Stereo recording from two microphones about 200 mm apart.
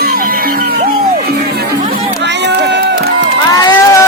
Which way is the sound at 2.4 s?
55° right (ahead or behind).